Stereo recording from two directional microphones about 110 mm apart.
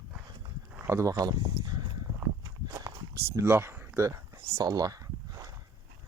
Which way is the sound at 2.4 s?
30° right (ahead or behind).